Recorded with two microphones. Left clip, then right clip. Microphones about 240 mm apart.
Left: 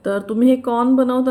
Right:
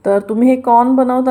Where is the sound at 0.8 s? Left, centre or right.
Centre.